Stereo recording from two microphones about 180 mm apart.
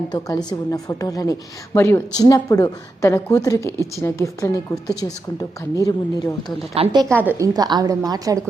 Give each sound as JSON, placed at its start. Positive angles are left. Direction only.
{"t": 0.1, "sound": "a woman's voice", "side_deg": 20}
{"t": 5.7, "sound": "a woman's voice", "side_deg": 20}
{"t": 6.7, "sound": "a woman's voice", "side_deg": -30}
{"t": 7.2, "sound": "a woman's voice", "side_deg": -15}